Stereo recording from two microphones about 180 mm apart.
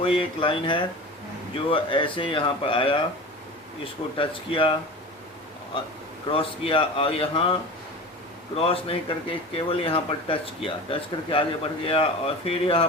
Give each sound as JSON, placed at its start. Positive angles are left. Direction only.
{"t": 0.0, "sound": "speech", "side_deg": 30}
{"t": 4.2, "sound": "speech", "side_deg": 30}
{"t": 6.2, "sound": "speech", "side_deg": 30}
{"t": 8.5, "sound": "speech", "side_deg": 30}